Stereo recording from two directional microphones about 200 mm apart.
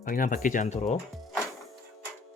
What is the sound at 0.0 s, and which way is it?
Speech, 45° left (ahead or behind).